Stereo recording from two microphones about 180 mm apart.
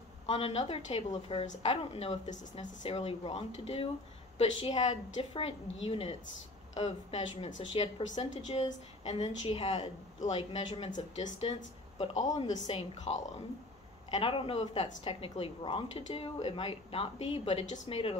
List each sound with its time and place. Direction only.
0.3 s a woman's voice: 35° left (ahead or behind)